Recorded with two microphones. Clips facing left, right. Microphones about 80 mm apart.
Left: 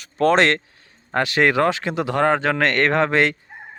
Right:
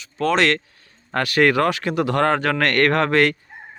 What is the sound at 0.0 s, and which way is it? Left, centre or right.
Speech, left.